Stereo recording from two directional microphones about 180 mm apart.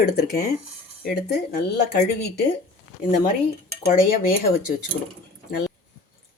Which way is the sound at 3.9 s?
50° left (ahead or behind).